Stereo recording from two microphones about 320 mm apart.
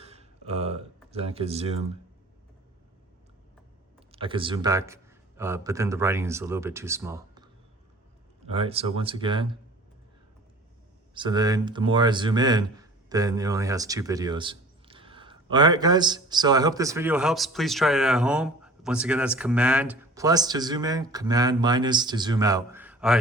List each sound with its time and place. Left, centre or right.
0.0 s burping: centre
1.1 s speech: centre
4.1 s speech: centre
11.1 s speech: centre